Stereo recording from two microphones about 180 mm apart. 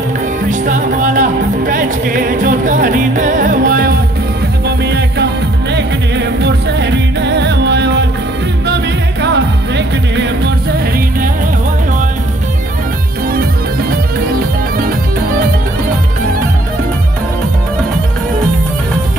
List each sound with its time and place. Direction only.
0.5 s music: 45° right (ahead or behind)
4.6 s music: 70° right (ahead or behind)
13.3 s music: 55° right (ahead or behind)